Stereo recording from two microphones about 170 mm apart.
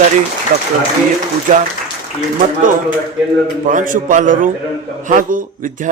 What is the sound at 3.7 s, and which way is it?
A man's voice, 50° right (ahead or behind).